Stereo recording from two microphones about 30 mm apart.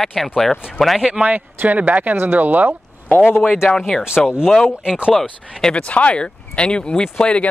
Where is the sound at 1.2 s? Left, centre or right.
Right.